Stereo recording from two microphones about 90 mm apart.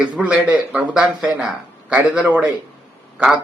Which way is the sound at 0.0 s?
15° right (ahead or behind).